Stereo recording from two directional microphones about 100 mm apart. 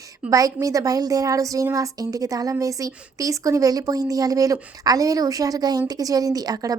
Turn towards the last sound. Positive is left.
turn(degrees=-40)  # may be behind; listen again after turning